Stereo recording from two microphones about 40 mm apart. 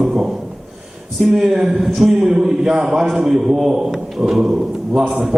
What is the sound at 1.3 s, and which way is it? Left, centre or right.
Speech, centre.